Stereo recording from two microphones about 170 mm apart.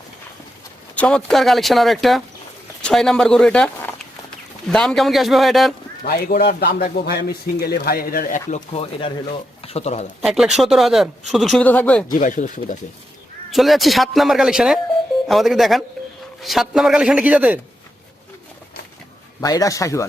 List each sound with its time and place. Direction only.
0.9 s speech: 5° left (ahead or behind)
6.1 s a man's voice: 70° left (ahead or behind); by 10.1 s 40° left (ahead or behind)
10.2 s speech: centre (ahead or behind)
12.0 s speech: 50° left (ahead or behind)
13.5 s speech: centre (ahead or behind)
19.4 s a man's voice: 20° left (ahead or behind)